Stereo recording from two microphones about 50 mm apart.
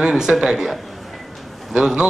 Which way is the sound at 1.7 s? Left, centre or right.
Centre.